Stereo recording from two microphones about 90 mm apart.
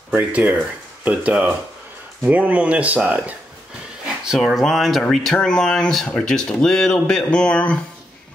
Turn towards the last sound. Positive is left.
turn(degrees=10)  # may be behind; listen again after turning